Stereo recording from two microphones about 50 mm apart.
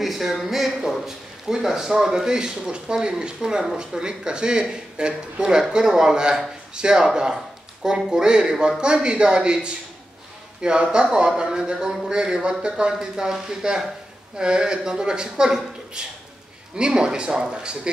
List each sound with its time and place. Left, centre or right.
0.0 s speech: centre